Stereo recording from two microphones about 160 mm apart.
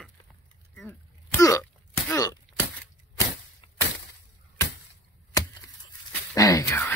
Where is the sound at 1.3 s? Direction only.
20° left (ahead or behind).